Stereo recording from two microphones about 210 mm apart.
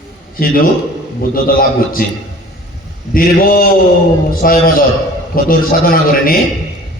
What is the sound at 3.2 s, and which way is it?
A man's voice, 45° left (ahead or behind).